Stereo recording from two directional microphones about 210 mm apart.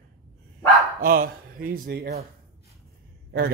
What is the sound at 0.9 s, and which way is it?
Speech, 45° right (ahead or behind).